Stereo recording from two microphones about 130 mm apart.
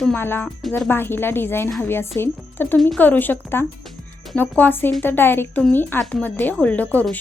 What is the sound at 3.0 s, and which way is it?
Speech, 15° left (ahead or behind).